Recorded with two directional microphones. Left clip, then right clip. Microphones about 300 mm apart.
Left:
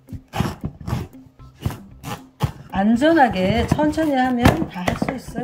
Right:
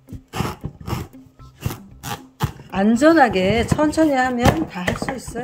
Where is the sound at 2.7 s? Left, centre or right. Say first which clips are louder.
Right 2 dB; centre.